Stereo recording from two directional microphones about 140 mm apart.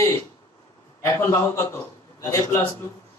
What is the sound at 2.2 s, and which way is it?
Speech, 25° left (ahead or behind).